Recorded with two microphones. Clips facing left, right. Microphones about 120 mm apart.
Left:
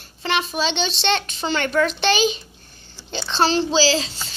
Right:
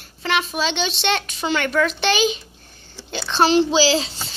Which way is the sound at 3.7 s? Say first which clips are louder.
Right 1 dB; 20° right (ahead or behind).